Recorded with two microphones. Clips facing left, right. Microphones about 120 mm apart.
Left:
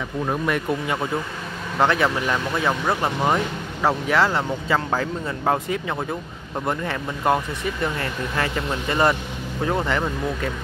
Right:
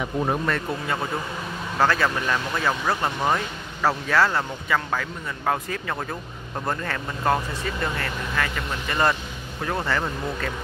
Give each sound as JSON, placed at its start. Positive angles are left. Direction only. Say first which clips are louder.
{"t": 0.5, "sound": "speech", "louder": "left 3 dB", "side_deg": 20}